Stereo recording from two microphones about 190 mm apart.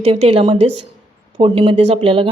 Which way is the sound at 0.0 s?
30° right (ahead or behind).